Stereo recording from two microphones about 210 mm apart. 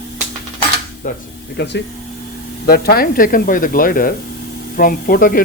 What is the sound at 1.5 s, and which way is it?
Speech, 55° left (ahead or behind).